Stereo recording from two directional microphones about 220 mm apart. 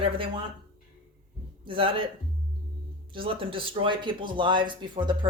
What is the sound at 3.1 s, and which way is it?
Speech, 25° right (ahead or behind).